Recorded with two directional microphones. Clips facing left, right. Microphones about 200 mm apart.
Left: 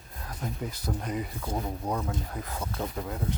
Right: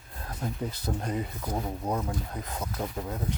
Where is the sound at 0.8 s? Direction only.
30° right (ahead or behind).